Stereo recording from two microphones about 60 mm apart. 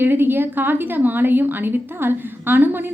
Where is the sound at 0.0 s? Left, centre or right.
Right.